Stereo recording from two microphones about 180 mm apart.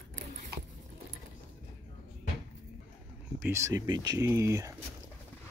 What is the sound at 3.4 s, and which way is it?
Speech, 15° right (ahead or behind).